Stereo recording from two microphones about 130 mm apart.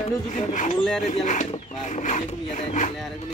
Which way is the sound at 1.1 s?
60° left (ahead or behind).